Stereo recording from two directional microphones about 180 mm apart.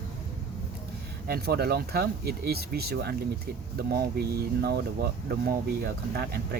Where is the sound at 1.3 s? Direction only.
60° right (ahead or behind).